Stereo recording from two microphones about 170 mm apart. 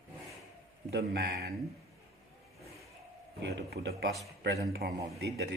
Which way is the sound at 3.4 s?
70° right (ahead or behind).